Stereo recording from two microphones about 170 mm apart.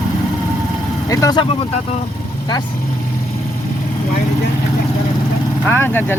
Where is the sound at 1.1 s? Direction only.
20° left (ahead or behind).